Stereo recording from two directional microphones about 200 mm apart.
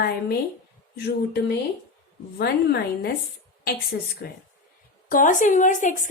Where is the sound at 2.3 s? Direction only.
55° left (ahead or behind).